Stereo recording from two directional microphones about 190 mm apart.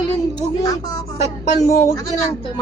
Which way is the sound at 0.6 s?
20° left (ahead or behind).